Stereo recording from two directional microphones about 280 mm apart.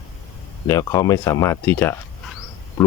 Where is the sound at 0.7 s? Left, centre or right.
Centre.